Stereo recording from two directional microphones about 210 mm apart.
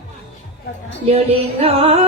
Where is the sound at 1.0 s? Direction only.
30° right (ahead or behind).